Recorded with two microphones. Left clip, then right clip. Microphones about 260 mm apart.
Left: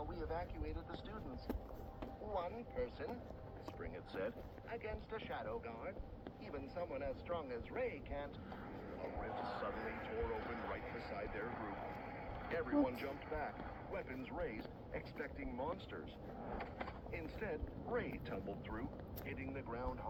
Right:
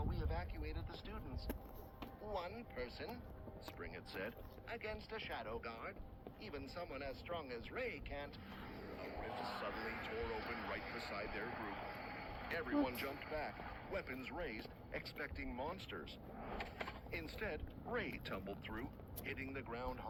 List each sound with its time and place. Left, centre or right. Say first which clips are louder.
0.1 s vehicle: left 3 dB; right
2.3 s a sound: left 3 dB; right
3.8 s speech: left 2 dB; right